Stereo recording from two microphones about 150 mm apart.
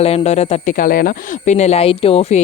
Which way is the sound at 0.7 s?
70° left (ahead or behind).